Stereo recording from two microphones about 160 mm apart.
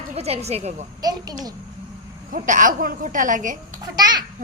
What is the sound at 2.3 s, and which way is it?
A child's voice, 55° right (ahead or behind).